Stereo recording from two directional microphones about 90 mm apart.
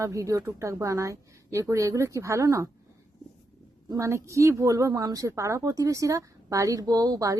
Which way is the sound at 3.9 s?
35° right (ahead or behind).